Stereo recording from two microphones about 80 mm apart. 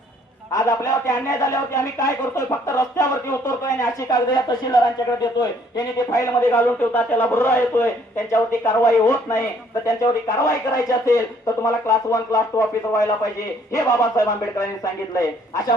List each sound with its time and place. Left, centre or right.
0.5 s a man's voice: left
6.5 s a man's voice: left